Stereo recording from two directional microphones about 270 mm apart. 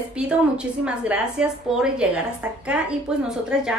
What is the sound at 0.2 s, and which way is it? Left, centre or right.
A woman's voice, centre.